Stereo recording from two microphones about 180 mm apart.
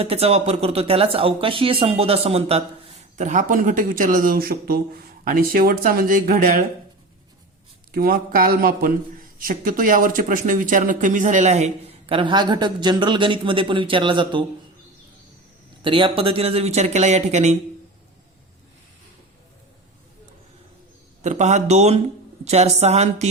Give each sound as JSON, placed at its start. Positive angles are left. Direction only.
{"t": 0.0, "sound": "speech", "side_deg": -35}
{"t": 7.9, "sound": "a man's voice", "side_deg": -55}
{"t": 15.8, "sound": "speech", "side_deg": -30}
{"t": 21.2, "sound": "speech", "side_deg": -40}